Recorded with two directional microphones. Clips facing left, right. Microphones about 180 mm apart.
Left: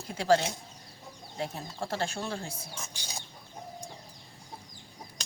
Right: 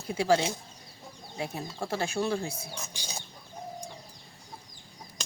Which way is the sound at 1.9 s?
10° right (ahead or behind).